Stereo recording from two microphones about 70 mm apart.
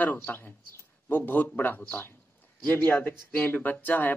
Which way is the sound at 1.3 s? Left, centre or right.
Left.